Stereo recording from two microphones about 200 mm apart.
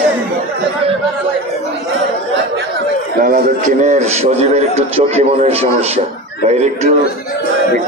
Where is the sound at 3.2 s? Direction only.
45° right (ahead or behind).